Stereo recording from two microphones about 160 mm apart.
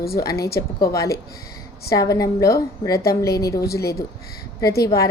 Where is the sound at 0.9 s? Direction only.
20° left (ahead or behind).